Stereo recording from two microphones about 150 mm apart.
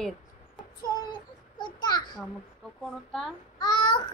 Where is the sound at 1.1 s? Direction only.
30° left (ahead or behind).